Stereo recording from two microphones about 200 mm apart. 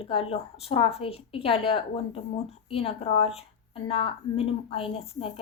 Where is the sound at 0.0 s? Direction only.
30° left (ahead or behind).